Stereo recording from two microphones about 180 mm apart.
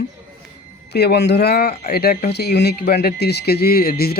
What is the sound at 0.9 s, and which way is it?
Speech, 65° left (ahead or behind).